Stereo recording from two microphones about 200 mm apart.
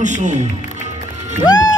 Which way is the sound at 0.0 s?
35° right (ahead or behind).